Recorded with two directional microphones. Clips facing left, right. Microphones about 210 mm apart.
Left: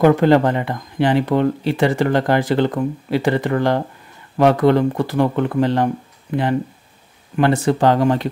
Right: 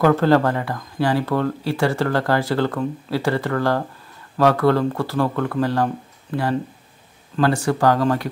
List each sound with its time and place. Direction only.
0.0 s speech: 20° left (ahead or behind)